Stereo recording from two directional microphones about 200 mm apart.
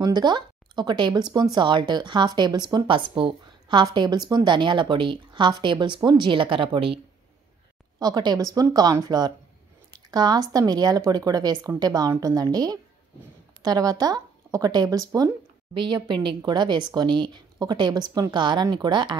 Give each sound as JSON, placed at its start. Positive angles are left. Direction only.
{"t": 0.0, "sound": "speech", "side_deg": -20}
{"t": 8.0, "sound": "speech", "side_deg": -20}